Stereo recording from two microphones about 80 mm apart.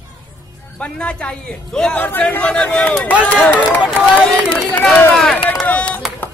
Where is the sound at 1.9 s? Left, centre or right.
Left.